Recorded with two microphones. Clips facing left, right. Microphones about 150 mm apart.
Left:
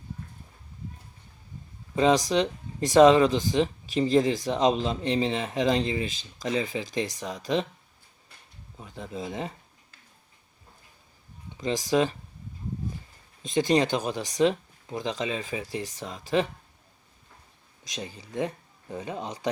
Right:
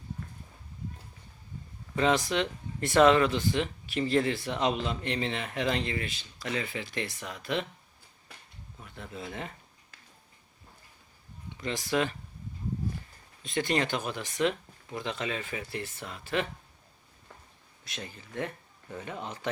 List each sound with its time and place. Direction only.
2.0 s speech: 20° left (ahead or behind)
8.8 s speech: 20° left (ahead or behind)
11.5 s speech: 20° left (ahead or behind)
13.5 s speech: 20° left (ahead or behind)
17.9 s speech: 15° left (ahead or behind)